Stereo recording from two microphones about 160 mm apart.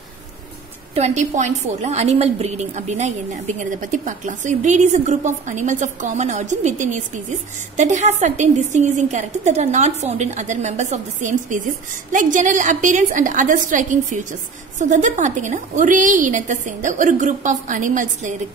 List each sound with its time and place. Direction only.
0.9 s a woman's voice: 45° right (ahead or behind)